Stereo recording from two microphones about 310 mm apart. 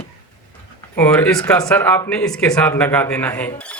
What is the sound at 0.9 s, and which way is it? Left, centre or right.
Speech, centre.